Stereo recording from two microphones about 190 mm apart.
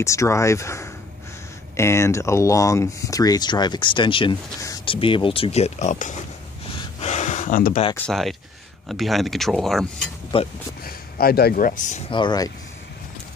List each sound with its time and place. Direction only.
0.0 s speech: 15° left (ahead or behind); by 6.1 s 40° left (ahead or behind)
7.0 s a sound: 35° left (ahead or behind)
8.1 s speech: centre (ahead or behind)
10.3 s speech: 30° left (ahead or behind)
10.8 s speech: 50° left (ahead or behind)
12.1 s speech: 25° left (ahead or behind)